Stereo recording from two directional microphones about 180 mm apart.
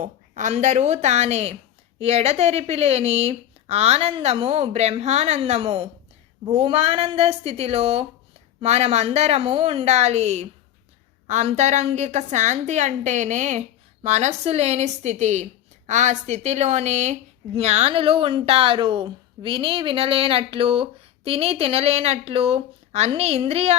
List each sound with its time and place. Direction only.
0.0 s speech: 45° right (ahead or behind)